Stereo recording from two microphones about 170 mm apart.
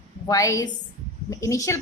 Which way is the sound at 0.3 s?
20° left (ahead or behind).